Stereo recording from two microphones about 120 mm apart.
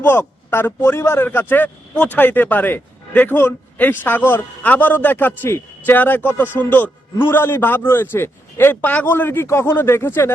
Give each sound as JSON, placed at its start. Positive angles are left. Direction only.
{"t": 0.0, "sound": "speech", "side_deg": 20}